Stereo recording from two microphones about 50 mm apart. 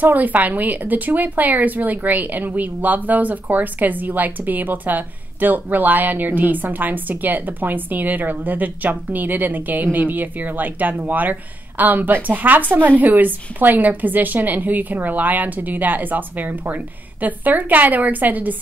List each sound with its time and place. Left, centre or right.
0.0 s speech: right